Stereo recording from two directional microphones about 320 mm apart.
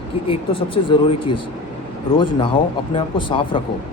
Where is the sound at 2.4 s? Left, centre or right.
Centre.